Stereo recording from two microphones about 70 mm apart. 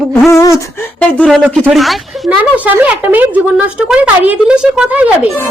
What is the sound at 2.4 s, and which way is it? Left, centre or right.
Speech, right.